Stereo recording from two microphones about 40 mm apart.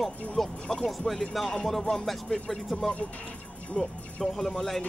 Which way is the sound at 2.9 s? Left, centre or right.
Left.